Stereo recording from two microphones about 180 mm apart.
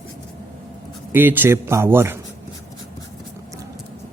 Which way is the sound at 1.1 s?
10° right (ahead or behind).